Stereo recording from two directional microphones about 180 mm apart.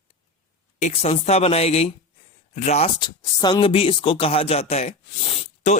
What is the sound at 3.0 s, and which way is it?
Speech, 25° left (ahead or behind).